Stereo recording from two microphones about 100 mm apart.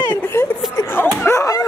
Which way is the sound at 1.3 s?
30° left (ahead or behind).